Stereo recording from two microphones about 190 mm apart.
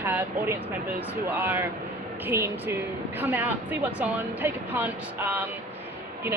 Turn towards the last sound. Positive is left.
turn(degrees=-10)  # may be behind; listen again after turning